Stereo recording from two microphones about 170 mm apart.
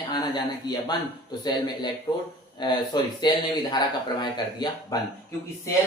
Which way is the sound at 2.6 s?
25° left (ahead or behind).